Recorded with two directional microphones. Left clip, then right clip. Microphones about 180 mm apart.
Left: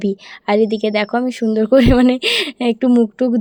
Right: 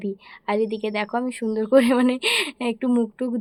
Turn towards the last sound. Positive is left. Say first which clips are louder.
# left 9 dB
turn(degrees=25)  # may be behind; listen again after turning